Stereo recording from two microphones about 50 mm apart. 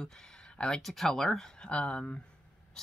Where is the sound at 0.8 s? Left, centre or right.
Centre.